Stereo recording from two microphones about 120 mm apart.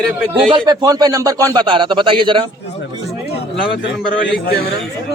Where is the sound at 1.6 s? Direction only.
40° right (ahead or behind).